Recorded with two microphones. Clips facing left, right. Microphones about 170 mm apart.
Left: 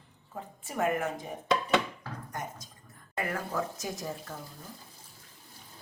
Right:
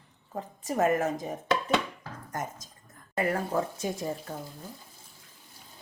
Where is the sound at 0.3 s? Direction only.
40° right (ahead or behind).